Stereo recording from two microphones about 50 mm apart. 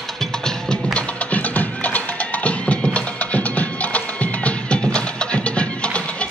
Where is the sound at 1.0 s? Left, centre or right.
Left.